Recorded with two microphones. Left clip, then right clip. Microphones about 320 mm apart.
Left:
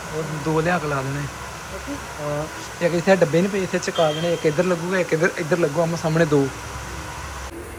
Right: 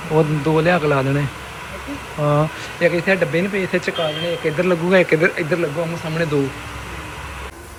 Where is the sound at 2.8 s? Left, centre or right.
Centre.